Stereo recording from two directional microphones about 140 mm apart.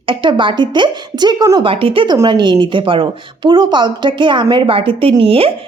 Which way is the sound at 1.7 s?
40° right (ahead or behind).